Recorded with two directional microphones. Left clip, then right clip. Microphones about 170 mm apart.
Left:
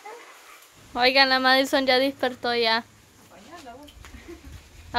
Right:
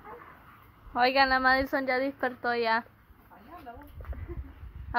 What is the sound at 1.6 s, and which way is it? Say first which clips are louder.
Speech: left 7 dB; 45° left (ahead or behind).